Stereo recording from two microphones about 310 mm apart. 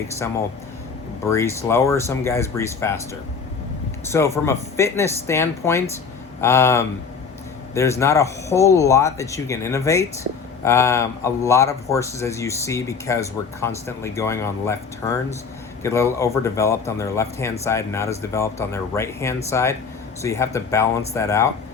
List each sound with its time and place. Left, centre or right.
1.2 s speech: centre
4.0 s speech: centre